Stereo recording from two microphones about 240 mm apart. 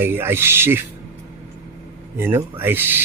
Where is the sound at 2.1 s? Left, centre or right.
Centre.